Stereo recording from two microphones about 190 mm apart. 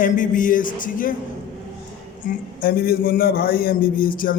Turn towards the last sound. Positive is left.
turn(degrees=45)  # may be behind; listen again after turning